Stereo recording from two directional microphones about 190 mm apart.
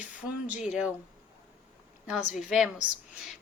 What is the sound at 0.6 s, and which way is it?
Speech, 5° right (ahead or behind).